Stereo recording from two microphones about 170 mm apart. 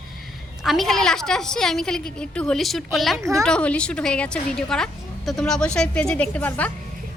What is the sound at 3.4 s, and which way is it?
A woman's voice, 5° left (ahead or behind).